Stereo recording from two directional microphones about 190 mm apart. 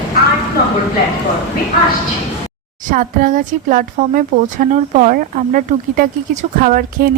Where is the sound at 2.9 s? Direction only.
45° right (ahead or behind).